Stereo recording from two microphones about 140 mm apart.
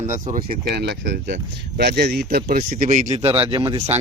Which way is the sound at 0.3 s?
45° right (ahead or behind).